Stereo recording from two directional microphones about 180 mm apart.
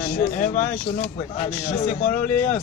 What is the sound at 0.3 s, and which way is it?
A man's voice, 45° left (ahead or behind).